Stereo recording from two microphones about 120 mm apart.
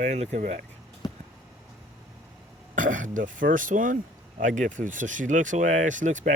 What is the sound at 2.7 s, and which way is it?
Speech, 90° right.